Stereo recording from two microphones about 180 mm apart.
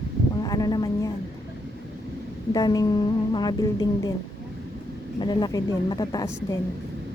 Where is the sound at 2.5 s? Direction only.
20° left (ahead or behind).